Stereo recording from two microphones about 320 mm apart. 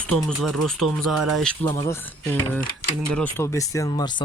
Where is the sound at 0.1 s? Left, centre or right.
Centre.